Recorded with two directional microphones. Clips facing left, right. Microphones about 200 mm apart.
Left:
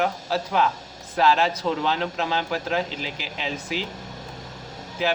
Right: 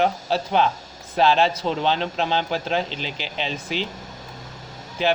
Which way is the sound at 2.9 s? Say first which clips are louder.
Right 1 dB; 5° left (ahead or behind).